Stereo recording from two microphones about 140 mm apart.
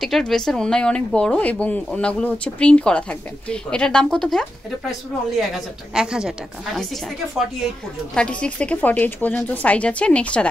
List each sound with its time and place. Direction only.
0.0 s a woman's voice: centre (ahead or behind)